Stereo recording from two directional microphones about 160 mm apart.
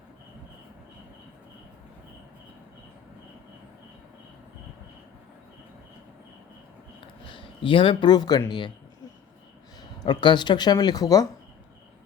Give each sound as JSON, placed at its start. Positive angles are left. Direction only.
{"t": 7.3, "sound": "speech", "side_deg": 30}
{"t": 10.0, "sound": "speech", "side_deg": 30}